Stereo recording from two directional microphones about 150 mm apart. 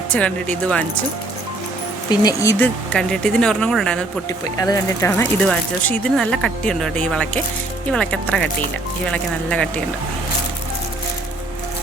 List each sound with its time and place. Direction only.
0.1 s speech: 10° left (ahead or behind)
2.0 s speech: 25° left (ahead or behind)
2.9 s speech: 5° left (ahead or behind)
4.6 s speech: 25° left (ahead or behind); by 9.8 s 5° left (ahead or behind)